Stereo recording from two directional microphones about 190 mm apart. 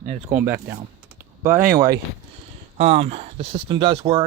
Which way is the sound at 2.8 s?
30° right (ahead or behind).